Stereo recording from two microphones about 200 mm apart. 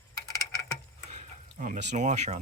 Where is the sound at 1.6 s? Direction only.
40° right (ahead or behind).